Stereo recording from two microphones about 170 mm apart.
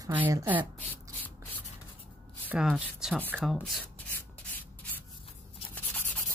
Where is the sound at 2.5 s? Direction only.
5° right (ahead or behind).